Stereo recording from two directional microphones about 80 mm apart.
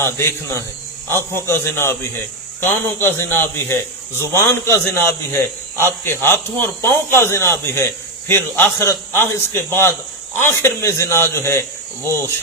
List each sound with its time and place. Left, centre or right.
0.0 s a man's voice: left